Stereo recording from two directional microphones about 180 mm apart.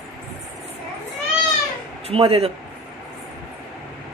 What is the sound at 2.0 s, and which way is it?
Speech, 35° right (ahead or behind).